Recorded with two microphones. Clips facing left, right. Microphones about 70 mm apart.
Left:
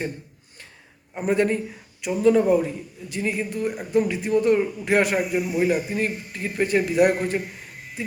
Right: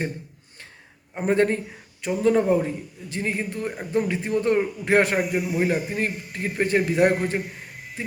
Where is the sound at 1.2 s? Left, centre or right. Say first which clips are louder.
Right 1 dB; right.